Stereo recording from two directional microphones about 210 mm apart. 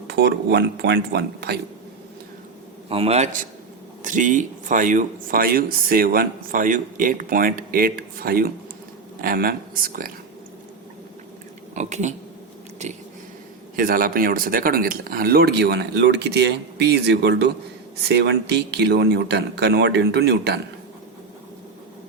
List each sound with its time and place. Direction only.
0.1 s speech: 50° right (ahead or behind)
2.9 s speech: 30° right (ahead or behind)
11.7 s speech: 35° right (ahead or behind)
13.7 s speech: 45° right (ahead or behind)